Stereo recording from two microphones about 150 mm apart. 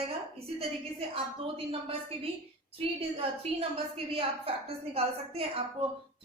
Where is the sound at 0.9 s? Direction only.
40° right (ahead or behind).